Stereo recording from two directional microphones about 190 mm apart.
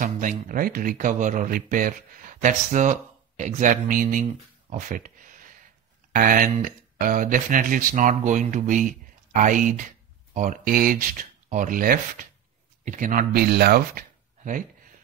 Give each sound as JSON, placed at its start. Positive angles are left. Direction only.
{"t": 0.0, "sound": "speech", "side_deg": -45}